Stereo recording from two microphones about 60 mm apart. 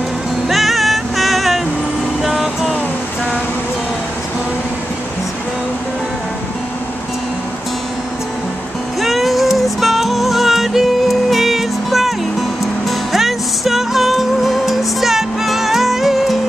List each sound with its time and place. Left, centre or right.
0.5 s music: centre
2.2 s vehicle: centre
9.0 s music: centre